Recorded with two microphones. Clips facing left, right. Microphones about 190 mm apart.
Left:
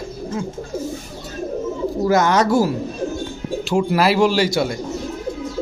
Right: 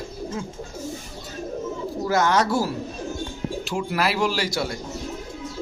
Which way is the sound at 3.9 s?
30° left (ahead or behind).